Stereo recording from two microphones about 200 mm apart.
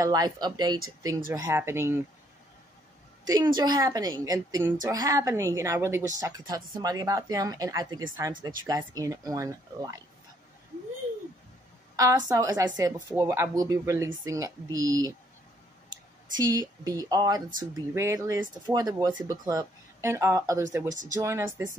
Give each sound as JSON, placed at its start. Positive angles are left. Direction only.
{"t": 0.0, "sound": "a woman's voice", "side_deg": -20}
{"t": 3.3, "sound": "a woman's voice", "side_deg": -20}
{"t": 12.3, "sound": "a woman's voice", "side_deg": -15}
{"t": 16.3, "sound": "a woman's voice", "side_deg": -15}